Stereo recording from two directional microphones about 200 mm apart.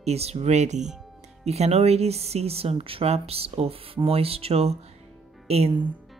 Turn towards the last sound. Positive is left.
turn(degrees=-30)  # may be behind; listen again after turning